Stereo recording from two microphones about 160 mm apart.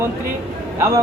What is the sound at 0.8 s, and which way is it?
Speech, 15° right (ahead or behind).